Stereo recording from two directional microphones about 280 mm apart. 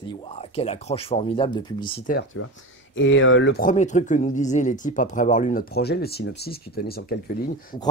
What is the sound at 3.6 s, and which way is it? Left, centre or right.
Speech, left.